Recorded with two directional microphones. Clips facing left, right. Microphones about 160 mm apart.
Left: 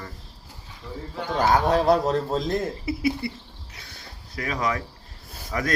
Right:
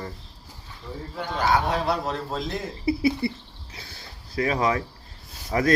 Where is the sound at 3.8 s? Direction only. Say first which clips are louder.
Right 2 dB; 30° right (ahead or behind).